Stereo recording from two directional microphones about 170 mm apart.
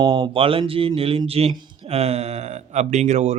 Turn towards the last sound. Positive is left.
turn(degrees=-40)  # may be behind; listen again after turning